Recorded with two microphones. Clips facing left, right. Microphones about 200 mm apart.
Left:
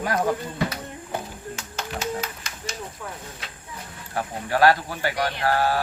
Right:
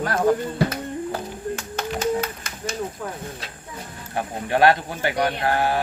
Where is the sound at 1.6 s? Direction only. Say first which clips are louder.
Right 5 dB; 55° right (ahead or behind).